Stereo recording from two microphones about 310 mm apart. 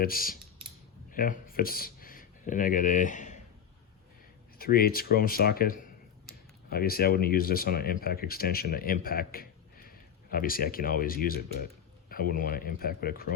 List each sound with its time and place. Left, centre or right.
0.0 s speech: left
4.5 s speech: left